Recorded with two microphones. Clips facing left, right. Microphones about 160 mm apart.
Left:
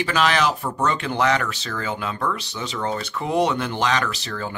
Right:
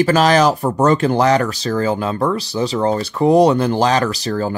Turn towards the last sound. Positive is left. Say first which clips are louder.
# right 9 dB
turn(degrees=-40)  # may be behind; listen again after turning